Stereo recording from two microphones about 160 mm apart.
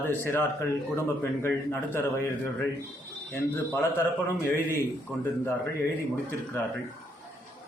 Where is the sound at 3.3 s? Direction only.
15° left (ahead or behind).